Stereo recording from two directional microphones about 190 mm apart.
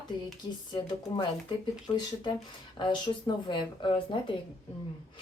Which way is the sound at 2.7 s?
25° left (ahead or behind).